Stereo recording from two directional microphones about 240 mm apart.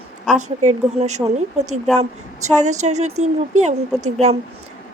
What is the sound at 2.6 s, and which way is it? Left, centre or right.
A woman's voice, right.